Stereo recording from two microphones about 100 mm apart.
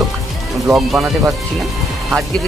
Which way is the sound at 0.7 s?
5° right (ahead or behind).